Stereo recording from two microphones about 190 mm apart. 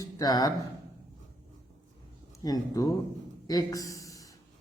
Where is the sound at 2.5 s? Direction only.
20° left (ahead or behind).